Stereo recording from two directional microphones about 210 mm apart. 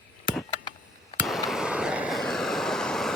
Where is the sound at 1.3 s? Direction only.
Centre (ahead or behind).